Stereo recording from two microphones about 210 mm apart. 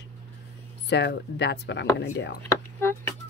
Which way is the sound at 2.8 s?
10° left (ahead or behind).